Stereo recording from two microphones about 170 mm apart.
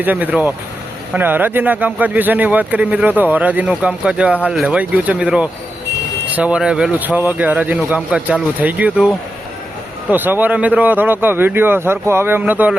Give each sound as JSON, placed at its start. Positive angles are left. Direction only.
{"t": 0.0, "sound": "speech", "side_deg": -10}